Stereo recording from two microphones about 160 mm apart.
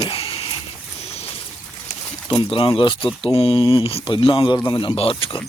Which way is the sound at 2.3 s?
35° left (ahead or behind).